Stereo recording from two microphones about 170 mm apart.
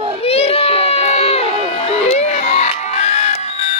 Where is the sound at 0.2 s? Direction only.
35° left (ahead or behind).